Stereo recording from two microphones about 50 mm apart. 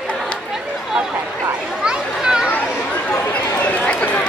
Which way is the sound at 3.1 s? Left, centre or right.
Left.